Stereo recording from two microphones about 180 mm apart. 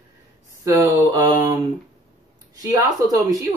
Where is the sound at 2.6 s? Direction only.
20° right (ahead or behind).